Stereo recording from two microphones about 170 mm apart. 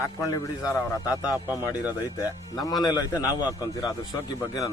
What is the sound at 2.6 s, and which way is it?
A man's voice, 25° left (ahead or behind).